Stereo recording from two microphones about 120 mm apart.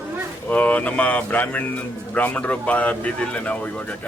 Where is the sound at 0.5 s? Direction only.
10° left (ahead or behind).